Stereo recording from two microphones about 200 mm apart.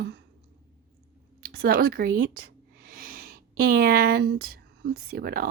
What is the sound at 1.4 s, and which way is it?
Speech, 50° right (ahead or behind).